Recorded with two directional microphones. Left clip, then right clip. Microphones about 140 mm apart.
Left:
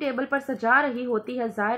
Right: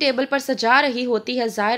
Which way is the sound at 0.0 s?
35° right (ahead or behind).